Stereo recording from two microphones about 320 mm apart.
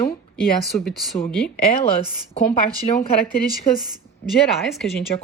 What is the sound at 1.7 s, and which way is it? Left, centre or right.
Speech, centre.